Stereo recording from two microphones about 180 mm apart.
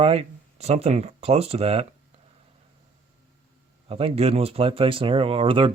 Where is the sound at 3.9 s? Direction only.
30° right (ahead or behind).